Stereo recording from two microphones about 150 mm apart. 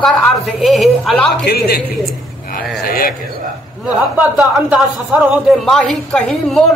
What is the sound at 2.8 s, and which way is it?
Speech, 80° left.